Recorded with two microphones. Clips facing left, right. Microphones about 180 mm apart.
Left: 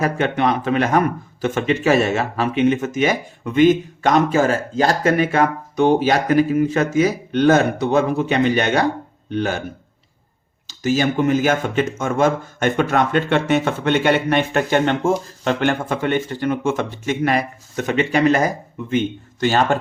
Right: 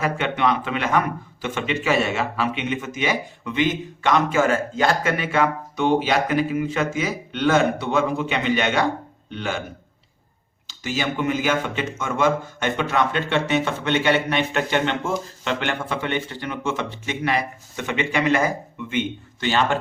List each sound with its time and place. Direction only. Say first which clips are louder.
0.0 s speech: left 3 dB; 45° left (ahead or behind)
10.7 s speech: left 7 dB; 45° left (ahead or behind)